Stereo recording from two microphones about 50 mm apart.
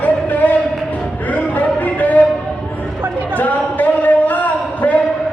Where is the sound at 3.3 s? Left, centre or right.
Left.